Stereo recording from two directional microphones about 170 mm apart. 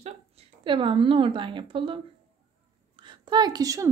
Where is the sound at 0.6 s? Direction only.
30° right (ahead or behind).